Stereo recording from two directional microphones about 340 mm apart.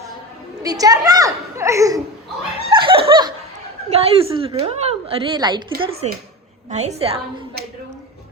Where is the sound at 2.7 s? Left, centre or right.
Centre.